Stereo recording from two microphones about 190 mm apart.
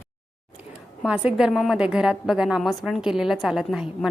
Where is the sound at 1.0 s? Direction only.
5° right (ahead or behind).